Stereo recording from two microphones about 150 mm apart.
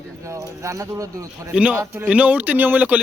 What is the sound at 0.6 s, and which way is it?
Speech, 20° right (ahead or behind).